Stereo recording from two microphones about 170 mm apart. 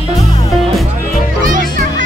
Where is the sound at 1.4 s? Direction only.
50° right (ahead or behind).